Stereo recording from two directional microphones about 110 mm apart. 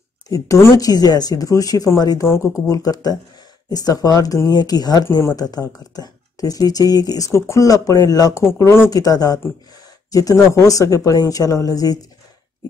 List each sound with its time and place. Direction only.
0.3 s speech: 25° left (ahead or behind)
2.7 s speech: 35° left (ahead or behind)